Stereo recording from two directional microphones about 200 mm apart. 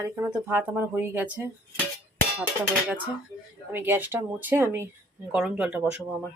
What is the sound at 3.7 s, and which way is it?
Speech, 10° right (ahead or behind).